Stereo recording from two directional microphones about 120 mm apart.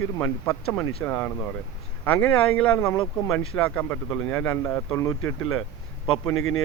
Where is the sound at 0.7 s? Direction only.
20° left (ahead or behind).